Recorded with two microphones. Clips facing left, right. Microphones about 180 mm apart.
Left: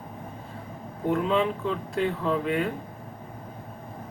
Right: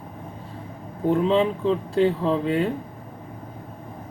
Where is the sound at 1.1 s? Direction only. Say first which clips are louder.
Right 4 dB; 30° right (ahead or behind).